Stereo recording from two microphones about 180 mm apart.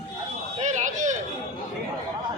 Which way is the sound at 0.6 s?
40° right (ahead or behind).